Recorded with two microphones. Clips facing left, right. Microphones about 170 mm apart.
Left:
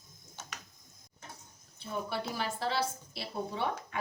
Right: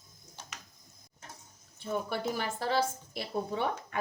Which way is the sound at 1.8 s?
50° right (ahead or behind).